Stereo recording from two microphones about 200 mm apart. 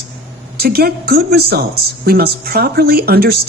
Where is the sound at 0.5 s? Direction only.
50° right (ahead or behind).